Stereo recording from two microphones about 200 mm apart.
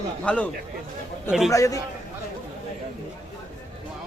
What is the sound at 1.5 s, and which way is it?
Speech, 15° left (ahead or behind).